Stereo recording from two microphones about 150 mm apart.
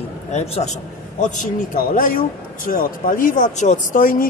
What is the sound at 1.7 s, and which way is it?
Speech, 65° left (ahead or behind).